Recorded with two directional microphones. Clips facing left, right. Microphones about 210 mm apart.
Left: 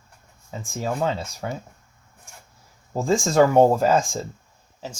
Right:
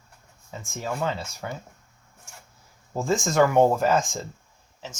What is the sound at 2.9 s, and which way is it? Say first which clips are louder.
Speech: left 3 dB; 30° left (ahead or behind).